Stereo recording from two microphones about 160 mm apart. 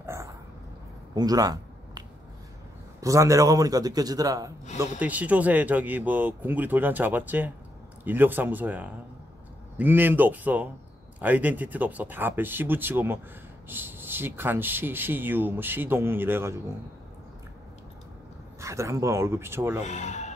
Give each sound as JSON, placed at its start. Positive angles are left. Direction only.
{"t": 0.0, "sound": "dog", "side_deg": -15}
{"t": 1.1, "sound": "a sound", "side_deg": -25}
{"t": 3.0, "sound": "a man's voice", "side_deg": -20}
{"t": 4.7, "sound": "speech", "side_deg": -10}
{"t": 18.6, "sound": "speech", "side_deg": -20}
{"t": 19.8, "sound": "speech", "side_deg": 45}